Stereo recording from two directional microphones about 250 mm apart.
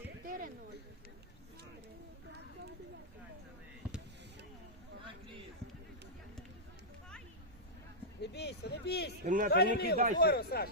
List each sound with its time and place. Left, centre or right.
0.0 s a sound: right
8.2 s speech: left
9.2 s a man's voice: right
9.5 s speech: left